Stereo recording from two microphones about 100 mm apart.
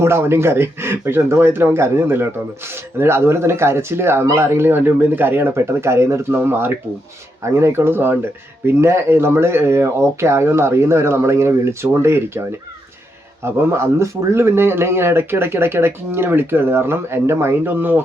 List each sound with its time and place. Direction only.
0.0 s speech: 25° right (ahead or behind)